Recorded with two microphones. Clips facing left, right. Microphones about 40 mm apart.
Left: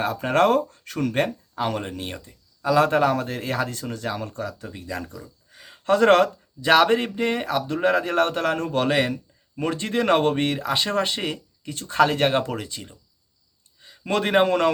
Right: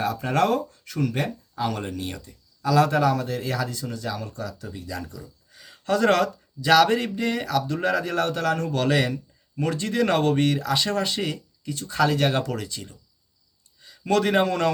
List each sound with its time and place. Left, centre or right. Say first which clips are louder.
0.0 s speech: left 3 dB; left
1.6 s a man's voice: left 1 dB; left